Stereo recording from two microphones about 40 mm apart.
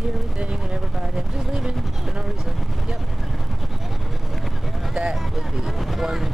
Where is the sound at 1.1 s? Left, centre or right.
Centre.